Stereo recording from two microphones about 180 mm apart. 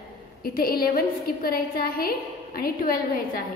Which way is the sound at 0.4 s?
55° left (ahead or behind).